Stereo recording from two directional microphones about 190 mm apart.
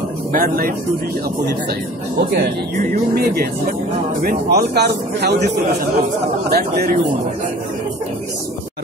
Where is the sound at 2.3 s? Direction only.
50° right (ahead or behind).